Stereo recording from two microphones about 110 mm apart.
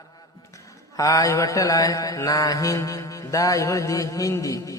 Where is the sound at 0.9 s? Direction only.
30° left (ahead or behind).